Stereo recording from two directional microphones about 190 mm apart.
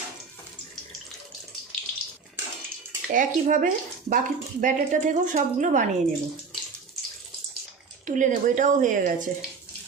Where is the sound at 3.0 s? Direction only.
45° right (ahead or behind).